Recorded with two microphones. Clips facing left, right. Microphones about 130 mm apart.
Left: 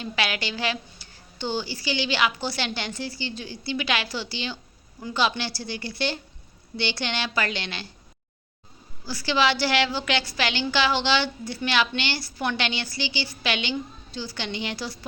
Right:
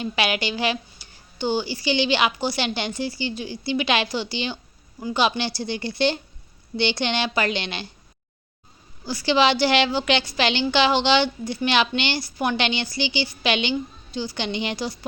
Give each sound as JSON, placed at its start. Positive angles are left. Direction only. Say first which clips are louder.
{"t": 0.0, "sound": "a woman's voice", "louder": "right 4 dB", "side_deg": -15}
{"t": 9.0, "sound": "a woman's voice", "louder": "right 4 dB", "side_deg": -20}